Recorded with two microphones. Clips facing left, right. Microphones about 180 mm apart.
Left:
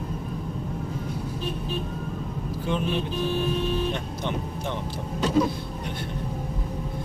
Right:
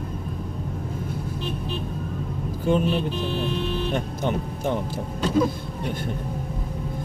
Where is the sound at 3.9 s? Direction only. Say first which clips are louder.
Right 4 dB; 45° right (ahead or behind).